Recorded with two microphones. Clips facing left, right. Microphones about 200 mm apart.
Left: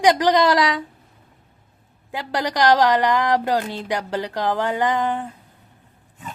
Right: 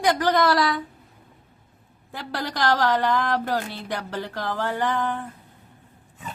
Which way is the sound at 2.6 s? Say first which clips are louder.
Left 5 dB; 15° left (ahead or behind).